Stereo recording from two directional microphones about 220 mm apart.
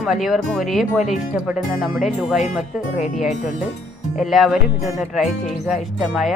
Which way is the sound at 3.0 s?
30° left (ahead or behind).